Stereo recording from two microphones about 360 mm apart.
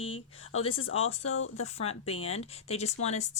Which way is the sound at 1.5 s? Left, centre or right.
Centre.